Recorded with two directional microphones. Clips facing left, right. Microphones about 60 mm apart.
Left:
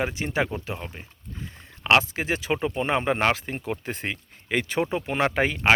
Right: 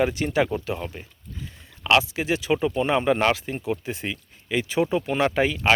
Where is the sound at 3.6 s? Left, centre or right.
Left.